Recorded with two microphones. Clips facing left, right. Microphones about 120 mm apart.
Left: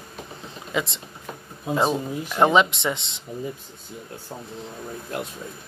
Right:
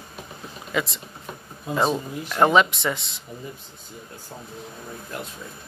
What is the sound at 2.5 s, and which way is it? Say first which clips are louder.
Speech: even; 25° left (ahead or behind).